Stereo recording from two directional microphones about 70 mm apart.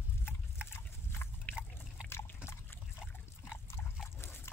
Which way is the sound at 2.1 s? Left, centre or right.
Left.